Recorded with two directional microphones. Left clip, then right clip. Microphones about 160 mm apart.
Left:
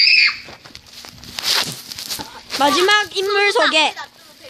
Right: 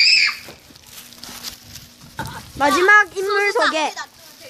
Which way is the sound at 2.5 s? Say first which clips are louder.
Left 1 dB; 25° left (ahead or behind).